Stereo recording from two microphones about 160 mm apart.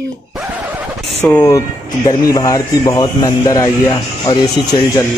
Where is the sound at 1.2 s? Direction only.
10° left (ahead or behind).